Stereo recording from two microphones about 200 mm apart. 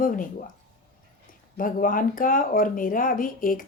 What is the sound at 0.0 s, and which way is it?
Speech, 45° left (ahead or behind).